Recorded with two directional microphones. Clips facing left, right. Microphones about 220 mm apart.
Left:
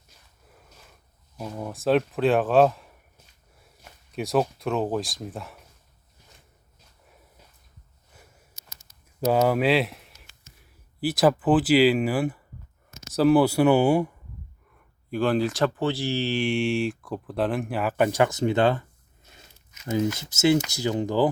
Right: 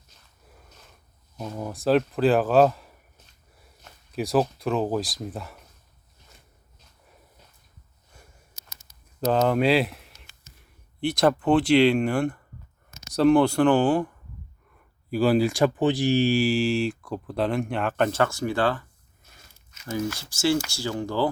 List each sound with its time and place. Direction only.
0.4 s a sound: centre (ahead or behind)
1.4 s speech: centre (ahead or behind)
4.1 s speech: centre (ahead or behind)
9.2 s speech: 10° left (ahead or behind)
15.1 s speech: 5° right (ahead or behind); by 21.2 s 20° left (ahead or behind)